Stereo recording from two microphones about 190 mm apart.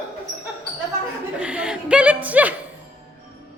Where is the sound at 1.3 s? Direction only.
5° right (ahead or behind).